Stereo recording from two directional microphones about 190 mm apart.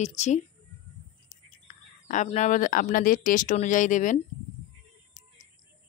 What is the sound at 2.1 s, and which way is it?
Speech, 40° left (ahead or behind).